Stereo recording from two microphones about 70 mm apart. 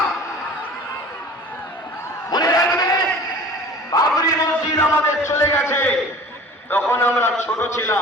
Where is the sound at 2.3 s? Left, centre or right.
Left.